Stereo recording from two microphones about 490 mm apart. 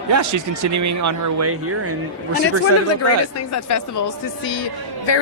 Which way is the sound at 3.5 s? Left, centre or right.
Left.